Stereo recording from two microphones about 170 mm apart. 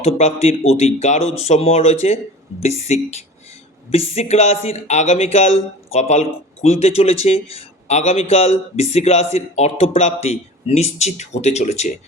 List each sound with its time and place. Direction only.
0.0 s speech: 40° left (ahead or behind)